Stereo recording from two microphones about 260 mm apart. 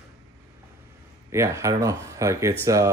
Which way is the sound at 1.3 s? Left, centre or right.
Centre.